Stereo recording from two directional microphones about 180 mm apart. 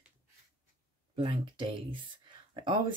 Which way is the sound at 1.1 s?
30° right (ahead or behind).